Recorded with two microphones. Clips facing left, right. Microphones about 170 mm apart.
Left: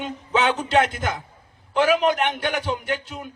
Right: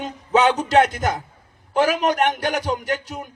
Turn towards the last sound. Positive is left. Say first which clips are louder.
# right 2 dB
turn(degrees=-40)  # may be behind; listen again after turning